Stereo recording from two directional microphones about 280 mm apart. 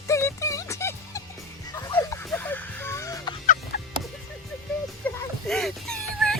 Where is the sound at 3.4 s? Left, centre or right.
Left.